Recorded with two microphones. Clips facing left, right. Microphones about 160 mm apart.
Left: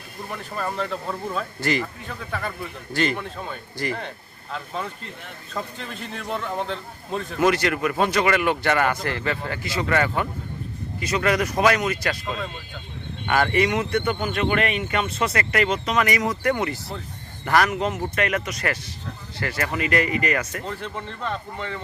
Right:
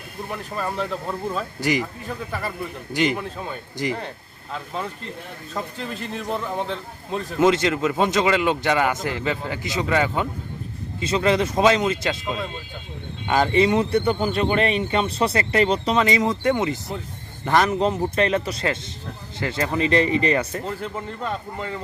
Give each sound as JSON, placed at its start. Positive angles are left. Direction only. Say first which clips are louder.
{"t": 0.3, "sound": "a man's voice", "louder": "right 1 dB", "side_deg": -5}
{"t": 1.6, "sound": "speech", "louder": "right 2 dB", "side_deg": -15}
{"t": 2.9, "sound": "speech", "louder": "right 2 dB", "side_deg": -15}
{"t": 3.2, "sound": "a man's voice", "louder": "right 2 dB", "side_deg": -5}
{"t": 3.8, "sound": "speech", "louder": "right 2 dB", "side_deg": -20}
{"t": 4.5, "sound": "a man's voice", "louder": "right 1 dB", "side_deg": 0}
{"t": 7.3, "sound": "speech", "louder": "right 2 dB", "side_deg": -20}
{"t": 20.7, "sound": "a man's voice", "louder": "right 2 dB", "side_deg": -5}